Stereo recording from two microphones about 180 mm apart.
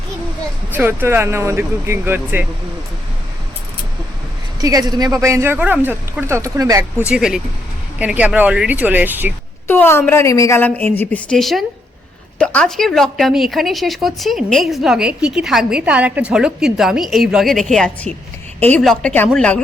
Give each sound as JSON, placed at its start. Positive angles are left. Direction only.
{"t": 0.7, "sound": "speech", "side_deg": -10}
{"t": 4.6, "sound": "speech", "side_deg": -20}
{"t": 7.1, "sound": "a woman's voice", "side_deg": -5}
{"t": 9.6, "sound": "a woman's voice", "side_deg": 10}